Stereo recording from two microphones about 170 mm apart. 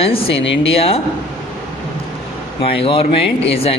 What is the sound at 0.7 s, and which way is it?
Speech, 35° left (ahead or behind).